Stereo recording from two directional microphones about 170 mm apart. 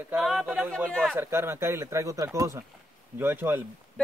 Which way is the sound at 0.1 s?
Centre (ahead or behind).